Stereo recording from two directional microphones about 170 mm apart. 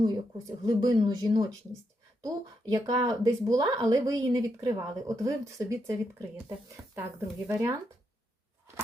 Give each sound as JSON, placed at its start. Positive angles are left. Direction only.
{"t": 0.0, "sound": "speech", "side_deg": -20}